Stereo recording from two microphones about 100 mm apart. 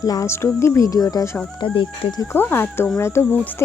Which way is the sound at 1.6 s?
55° left (ahead or behind).